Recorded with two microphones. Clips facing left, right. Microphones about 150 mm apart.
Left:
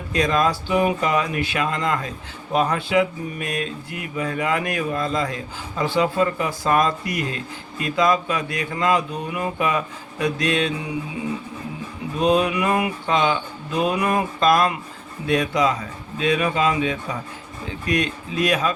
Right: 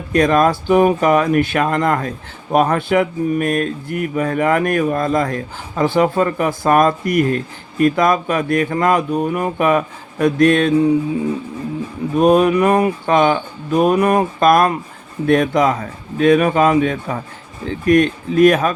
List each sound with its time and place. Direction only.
0.1 s speech: 55° right (ahead or behind)
12.1 s speech: 55° right (ahead or behind)